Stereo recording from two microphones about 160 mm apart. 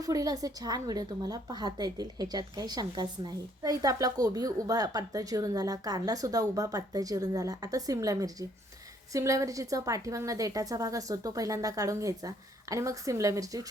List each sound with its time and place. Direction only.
0.0 s a woman's voice: 20° right (ahead or behind)